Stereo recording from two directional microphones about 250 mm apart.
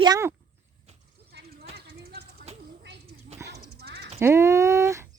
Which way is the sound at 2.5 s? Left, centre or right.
Right.